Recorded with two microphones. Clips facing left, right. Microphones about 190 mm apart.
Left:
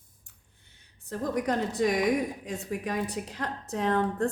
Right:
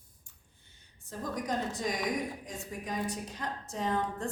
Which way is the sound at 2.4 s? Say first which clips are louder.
Left 7 dB; 70° left (ahead or behind).